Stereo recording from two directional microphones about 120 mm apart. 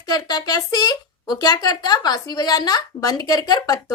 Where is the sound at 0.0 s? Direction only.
35° left (ahead or behind).